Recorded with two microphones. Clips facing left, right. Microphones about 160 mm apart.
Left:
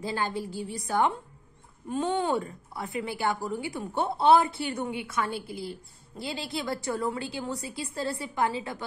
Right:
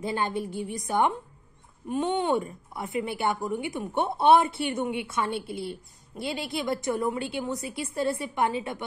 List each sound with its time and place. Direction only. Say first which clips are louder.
0.0 s a woman's voice: right 2 dB; 20° right (ahead or behind)